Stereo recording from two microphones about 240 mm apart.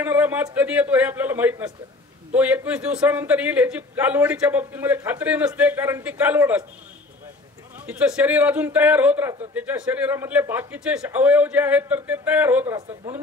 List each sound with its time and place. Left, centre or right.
0.0 s a man's voice: centre
7.8 s a man's voice: centre